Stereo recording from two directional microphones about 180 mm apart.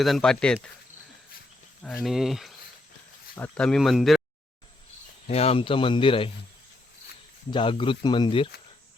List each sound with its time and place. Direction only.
0.0 s speech: centre (ahead or behind)
1.8 s speech: centre (ahead or behind)
5.3 s speech: 35° left (ahead or behind)
7.5 s speech: 30° left (ahead or behind)